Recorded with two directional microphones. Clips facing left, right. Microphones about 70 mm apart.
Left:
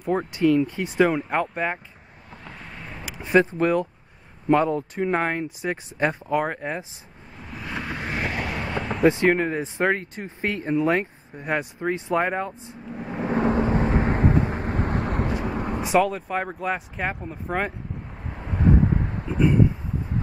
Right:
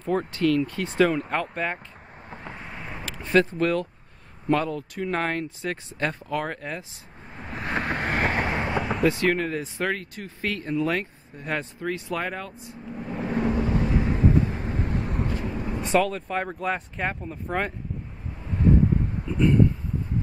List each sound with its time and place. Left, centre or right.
0.0 s speech: centre
2.3 s vehicle: right
3.1 s speech: centre
7.4 s vehicle: right
9.0 s speech: left
12.9 s vehicle: centre
13.4 s vehicle: left
15.8 s speech: centre
18.3 s wind noise: left